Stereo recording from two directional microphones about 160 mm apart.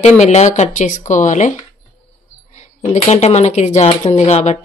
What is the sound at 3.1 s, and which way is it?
Speech, 45° left (ahead or behind).